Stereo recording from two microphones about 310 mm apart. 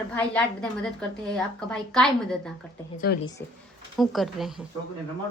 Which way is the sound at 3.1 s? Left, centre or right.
Left.